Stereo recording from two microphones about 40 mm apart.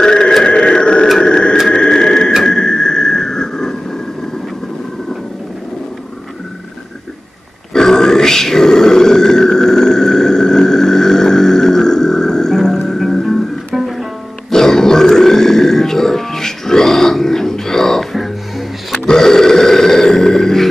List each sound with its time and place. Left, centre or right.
0.0 s a sound: centre
7.7 s grunt: centre
13.7 s music: centre
14.5 s grunt: centre
19.0 s burping: centre